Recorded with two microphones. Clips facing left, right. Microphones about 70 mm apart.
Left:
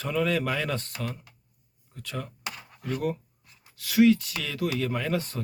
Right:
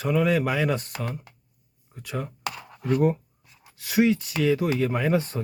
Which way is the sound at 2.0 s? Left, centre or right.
Centre.